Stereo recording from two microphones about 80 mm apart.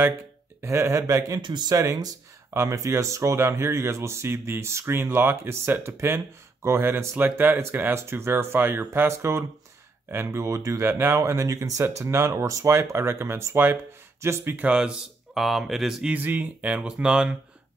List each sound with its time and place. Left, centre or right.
0.0 s a sound: right
0.7 s speech: right
1.4 s speech: right
1.8 s speech: right
2.5 s speech: right
14.7 s speech: centre
16.1 s speech: right